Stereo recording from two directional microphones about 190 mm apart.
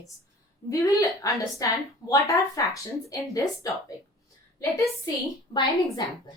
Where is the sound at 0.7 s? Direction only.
15° left (ahead or behind).